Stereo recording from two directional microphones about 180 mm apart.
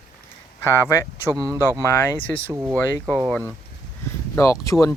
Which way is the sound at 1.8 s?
15° left (ahead or behind).